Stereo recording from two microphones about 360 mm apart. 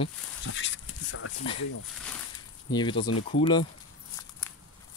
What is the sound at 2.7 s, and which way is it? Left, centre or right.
Speech, centre.